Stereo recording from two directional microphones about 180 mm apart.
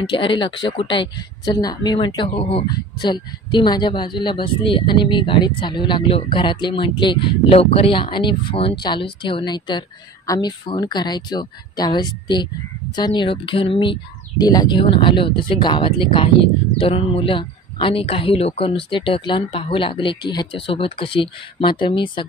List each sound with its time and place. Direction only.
0.1 s a woman's voice: 30° left (ahead or behind)